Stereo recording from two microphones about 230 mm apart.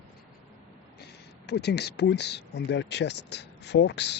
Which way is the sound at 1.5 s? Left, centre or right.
Left.